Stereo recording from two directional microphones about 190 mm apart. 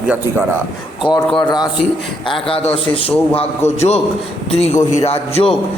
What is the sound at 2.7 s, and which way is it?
A man's voice, 30° left (ahead or behind).